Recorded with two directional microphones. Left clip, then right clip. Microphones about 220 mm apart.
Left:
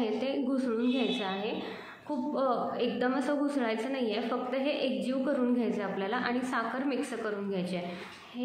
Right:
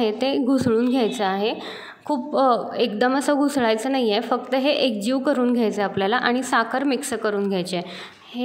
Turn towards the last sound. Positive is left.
turn(degrees=-45)  # may be behind; listen again after turning